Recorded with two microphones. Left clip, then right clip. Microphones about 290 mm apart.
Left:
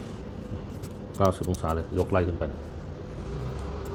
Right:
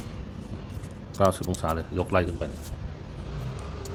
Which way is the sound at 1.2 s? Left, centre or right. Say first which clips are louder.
Right 2 dB; centre.